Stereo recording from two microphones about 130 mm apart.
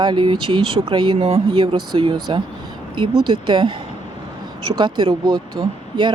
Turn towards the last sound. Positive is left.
turn(degrees=-35)  # may be behind; listen again after turning